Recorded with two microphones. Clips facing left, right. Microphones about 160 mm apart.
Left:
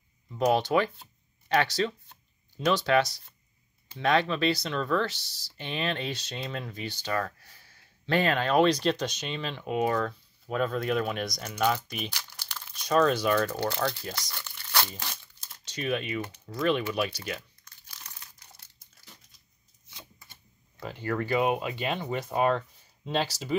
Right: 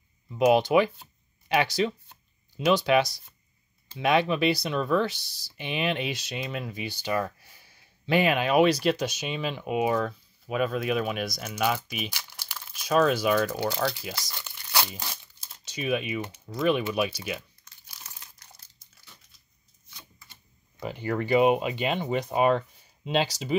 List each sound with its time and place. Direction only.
0.3 s speech: 10° right (ahead or behind)
17.8 s crumpling: 10° right (ahead or behind)
20.8 s speech: 15° right (ahead or behind)